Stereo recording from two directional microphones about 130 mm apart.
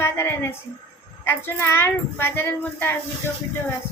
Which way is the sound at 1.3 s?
20° left (ahead or behind).